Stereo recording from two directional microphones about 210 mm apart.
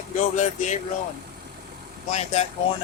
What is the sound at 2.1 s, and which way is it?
Speech, 35° left (ahead or behind).